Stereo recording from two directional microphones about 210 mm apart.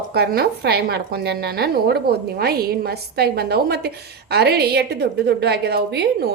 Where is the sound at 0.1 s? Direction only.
50° right (ahead or behind).